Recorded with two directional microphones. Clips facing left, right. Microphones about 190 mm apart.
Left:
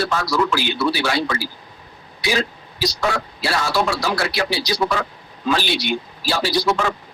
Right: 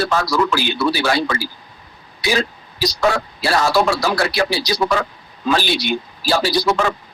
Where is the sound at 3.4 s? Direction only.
40° right (ahead or behind).